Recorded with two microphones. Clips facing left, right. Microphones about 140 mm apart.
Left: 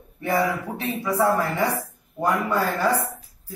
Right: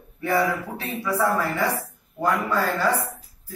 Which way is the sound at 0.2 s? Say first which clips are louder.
Even; 15° left (ahead or behind).